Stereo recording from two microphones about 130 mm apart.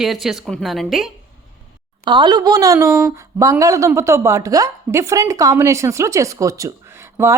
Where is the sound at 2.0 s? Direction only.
35° right (ahead or behind).